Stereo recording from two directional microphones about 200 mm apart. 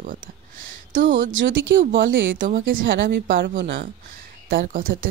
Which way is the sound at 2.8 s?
65° right (ahead or behind).